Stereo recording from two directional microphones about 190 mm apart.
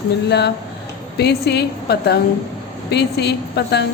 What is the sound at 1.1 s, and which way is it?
A woman's voice, 60° left (ahead or behind).